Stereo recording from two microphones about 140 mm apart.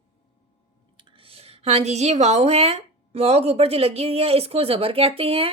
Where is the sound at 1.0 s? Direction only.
40° right (ahead or behind).